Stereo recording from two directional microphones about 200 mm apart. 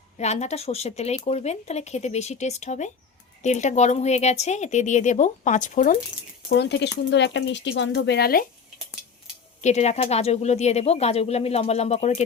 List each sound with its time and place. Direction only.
0.2 s speech: 35° left (ahead or behind)
6.5 s speech: 60° left (ahead or behind)
9.6 s speech: 35° left (ahead or behind)